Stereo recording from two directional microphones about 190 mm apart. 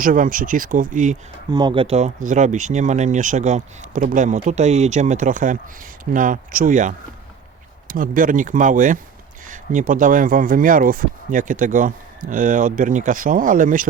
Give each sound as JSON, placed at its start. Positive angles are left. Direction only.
{"t": 0.0, "sound": "speech", "side_deg": -45}
{"t": 1.5, "sound": "speech", "side_deg": -25}